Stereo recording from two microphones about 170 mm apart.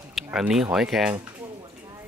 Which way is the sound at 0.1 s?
5° right (ahead or behind).